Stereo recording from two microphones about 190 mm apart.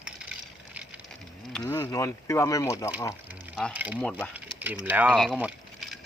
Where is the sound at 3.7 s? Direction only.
10° right (ahead or behind).